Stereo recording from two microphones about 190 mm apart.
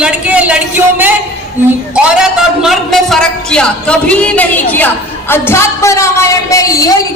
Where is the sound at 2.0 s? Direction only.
5° right (ahead or behind); by 6.9 s 20° left (ahead or behind).